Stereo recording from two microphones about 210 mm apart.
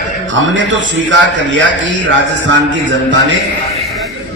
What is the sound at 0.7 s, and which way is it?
A man's voice, 60° right (ahead or behind).